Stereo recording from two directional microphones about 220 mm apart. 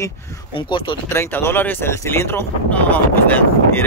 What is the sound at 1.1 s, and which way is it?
Speech, 10° left (ahead or behind).